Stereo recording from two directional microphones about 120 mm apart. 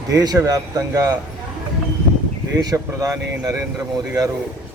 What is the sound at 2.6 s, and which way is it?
Speech, 30° right (ahead or behind).